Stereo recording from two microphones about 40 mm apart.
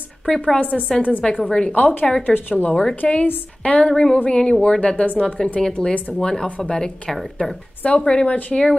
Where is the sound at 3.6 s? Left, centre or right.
Left.